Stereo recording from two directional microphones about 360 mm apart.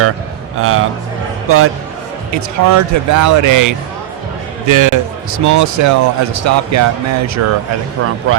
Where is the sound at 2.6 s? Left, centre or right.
Right.